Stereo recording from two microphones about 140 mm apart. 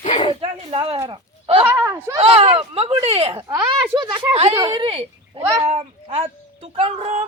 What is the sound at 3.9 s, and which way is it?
Speech, 30° right (ahead or behind).